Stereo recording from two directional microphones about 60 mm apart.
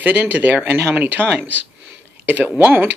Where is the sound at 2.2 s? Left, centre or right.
Right.